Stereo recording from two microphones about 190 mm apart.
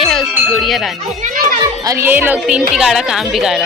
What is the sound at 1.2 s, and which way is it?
Children playing, 50° right (ahead or behind).